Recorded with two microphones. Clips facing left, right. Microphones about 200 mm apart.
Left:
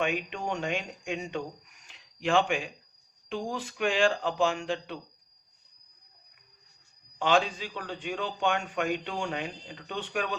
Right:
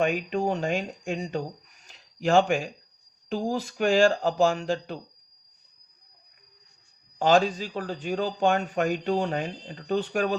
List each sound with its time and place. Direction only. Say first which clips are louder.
0.0 s a man's voice: right 6 dB; 40° right (ahead or behind)
7.2 s a man's voice: right 5 dB; 40° right (ahead or behind)